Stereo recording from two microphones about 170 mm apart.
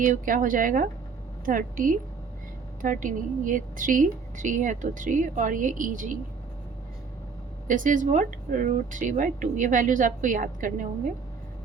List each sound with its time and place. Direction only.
0.0 s a woman's voice: 50° right (ahead or behind)
7.7 s a woman's voice: 50° right (ahead or behind)